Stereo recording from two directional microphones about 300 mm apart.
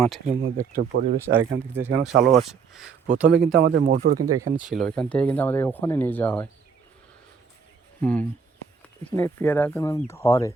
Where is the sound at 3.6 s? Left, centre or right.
Right.